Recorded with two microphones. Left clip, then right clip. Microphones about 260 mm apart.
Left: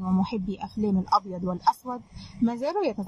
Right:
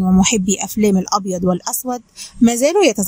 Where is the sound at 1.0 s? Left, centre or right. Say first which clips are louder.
Right 7 dB; right.